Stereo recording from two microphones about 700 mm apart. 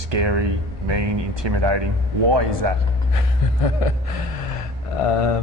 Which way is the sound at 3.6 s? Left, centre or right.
Left.